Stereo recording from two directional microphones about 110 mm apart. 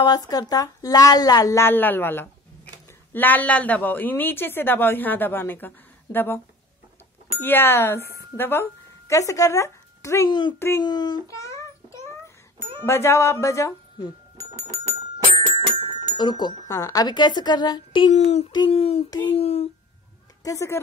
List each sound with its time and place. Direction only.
0.0 s speech: 35° left (ahead or behind)
10.8 s a woman's voice: 40° left (ahead or behind)
11.2 s a sound: 30° left (ahead or behind)
12.8 s speech: 25° left (ahead or behind)
14.5 s doorbell: 30° right (ahead or behind)
15.5 s music: 55° right (ahead or behind)
16.2 s speech: 45° left (ahead or behind)
16.6 s a woman's voice: 30° left (ahead or behind)
18.1 s child singing: 80° left
18.7 s a sound: 65° left (ahead or behind)
20.4 s speech: 25° left (ahead or behind)